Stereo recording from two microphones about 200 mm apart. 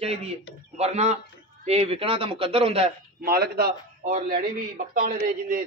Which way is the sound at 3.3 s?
50° right (ahead or behind).